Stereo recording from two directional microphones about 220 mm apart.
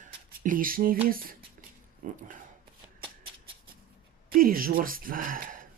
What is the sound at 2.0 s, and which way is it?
Speech, 35° right (ahead or behind).